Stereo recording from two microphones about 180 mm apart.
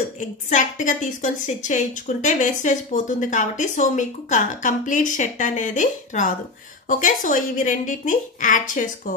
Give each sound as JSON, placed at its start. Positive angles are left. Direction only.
{"t": 0.5, "sound": "a woman's voice", "side_deg": 45}